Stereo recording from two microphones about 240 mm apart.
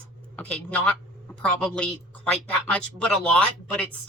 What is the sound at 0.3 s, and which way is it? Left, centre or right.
Speech, centre.